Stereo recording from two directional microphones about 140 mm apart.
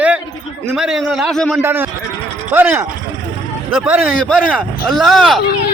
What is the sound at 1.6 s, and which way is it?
A man's voice, 15° right (ahead or behind).